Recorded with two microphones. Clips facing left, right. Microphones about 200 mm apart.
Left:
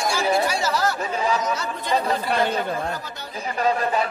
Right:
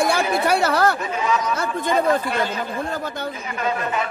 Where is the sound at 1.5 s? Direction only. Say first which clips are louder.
Right 3 dB; 50° right (ahead or behind).